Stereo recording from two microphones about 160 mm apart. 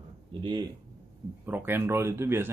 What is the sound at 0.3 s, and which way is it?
Speech, 30° right (ahead or behind).